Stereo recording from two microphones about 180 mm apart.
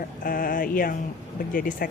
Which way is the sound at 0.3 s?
50° left (ahead or behind).